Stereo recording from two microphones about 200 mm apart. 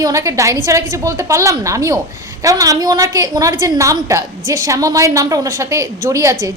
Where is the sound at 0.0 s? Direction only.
15° right (ahead or behind).